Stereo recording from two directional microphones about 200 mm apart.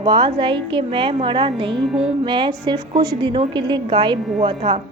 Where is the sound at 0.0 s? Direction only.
25° right (ahead or behind).